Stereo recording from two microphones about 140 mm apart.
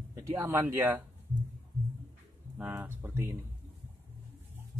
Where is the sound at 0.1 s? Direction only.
20° right (ahead or behind).